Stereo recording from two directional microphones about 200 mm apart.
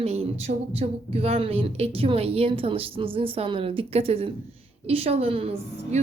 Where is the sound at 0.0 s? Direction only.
30° right (ahead or behind).